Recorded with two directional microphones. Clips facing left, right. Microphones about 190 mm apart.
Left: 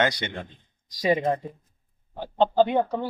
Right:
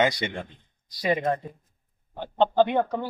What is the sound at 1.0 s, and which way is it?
Speech, 20° left (ahead or behind).